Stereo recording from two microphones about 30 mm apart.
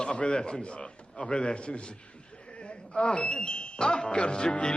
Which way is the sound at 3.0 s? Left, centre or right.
Left.